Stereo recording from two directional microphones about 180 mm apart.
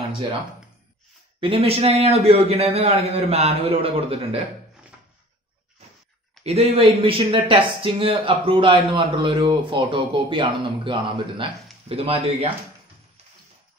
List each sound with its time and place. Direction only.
1.4 s a man's voice: 30° right (ahead or behind)
6.4 s a man's voice: 35° right (ahead or behind)